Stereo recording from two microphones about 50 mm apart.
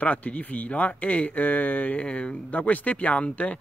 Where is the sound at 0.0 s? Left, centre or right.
Left.